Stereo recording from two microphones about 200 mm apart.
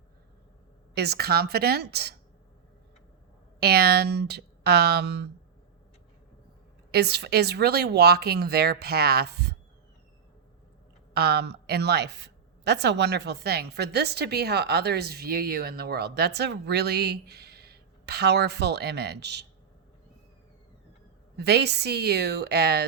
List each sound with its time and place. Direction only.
0.9 s speech: 55° right (ahead or behind)
3.6 s a woman's voice: 55° right (ahead or behind)
6.9 s speech: 55° right (ahead or behind)
11.1 s a woman's voice: 55° right (ahead or behind)
21.3 s a woman's voice: 55° right (ahead or behind)